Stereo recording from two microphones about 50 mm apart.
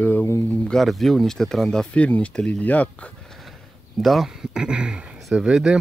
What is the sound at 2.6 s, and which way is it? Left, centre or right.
Speech, left.